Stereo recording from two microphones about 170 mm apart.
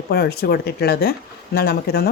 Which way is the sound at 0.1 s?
70° left (ahead or behind).